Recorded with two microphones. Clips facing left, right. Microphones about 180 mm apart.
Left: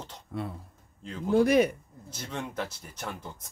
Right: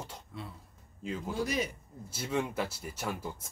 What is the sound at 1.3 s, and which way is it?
Speech, 60° left (ahead or behind).